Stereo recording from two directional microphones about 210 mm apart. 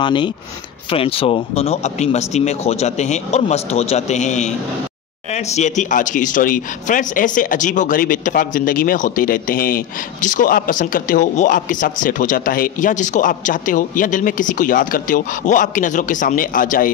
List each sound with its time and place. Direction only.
0.0 s speech: 20° left (ahead or behind); by 16.9 s 40° left (ahead or behind)